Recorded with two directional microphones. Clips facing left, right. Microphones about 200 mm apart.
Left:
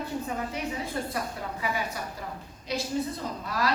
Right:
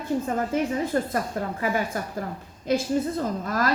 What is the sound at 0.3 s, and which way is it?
A woman's voice, 45° right (ahead or behind).